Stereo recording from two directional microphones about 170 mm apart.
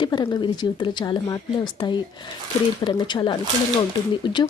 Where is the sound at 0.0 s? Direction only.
30° left (ahead or behind).